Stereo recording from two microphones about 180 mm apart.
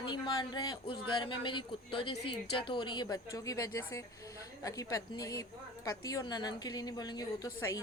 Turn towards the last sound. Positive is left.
turn(degrees=15)  # may be behind; listen again after turning